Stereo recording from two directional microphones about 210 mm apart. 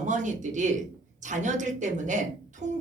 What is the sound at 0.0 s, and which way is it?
A woman's voice, 35° right (ahead or behind).